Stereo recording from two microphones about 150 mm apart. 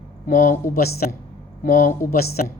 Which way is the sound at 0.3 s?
65° left (ahead or behind).